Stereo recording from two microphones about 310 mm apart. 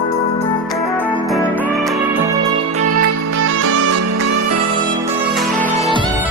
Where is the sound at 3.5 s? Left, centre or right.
Right.